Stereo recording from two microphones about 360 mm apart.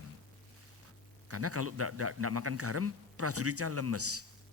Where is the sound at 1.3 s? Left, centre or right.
Right.